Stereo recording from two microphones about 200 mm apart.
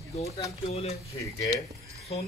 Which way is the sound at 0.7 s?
30° left (ahead or behind).